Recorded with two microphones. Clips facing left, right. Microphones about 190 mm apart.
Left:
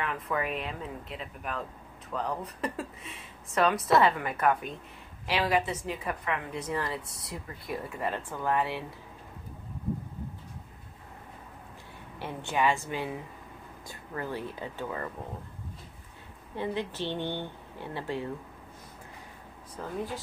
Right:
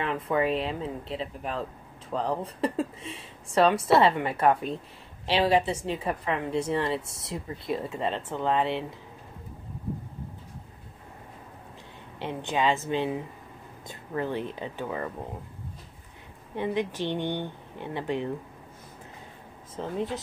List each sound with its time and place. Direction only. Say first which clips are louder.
0.0 s a woman's voice: right 6 dB; 30° right (ahead or behind)
12.2 s a woman's voice: right 2 dB; 20° right (ahead or behind)
16.5 s speech: right 4 dB; 15° right (ahead or behind)
19.7 s a woman's voice: right 4 dB; 25° right (ahead or behind)